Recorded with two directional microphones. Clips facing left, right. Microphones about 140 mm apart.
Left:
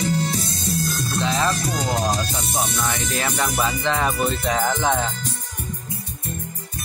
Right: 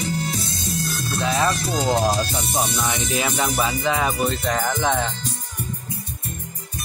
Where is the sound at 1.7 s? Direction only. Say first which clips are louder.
Right 3 dB; 25° right (ahead or behind).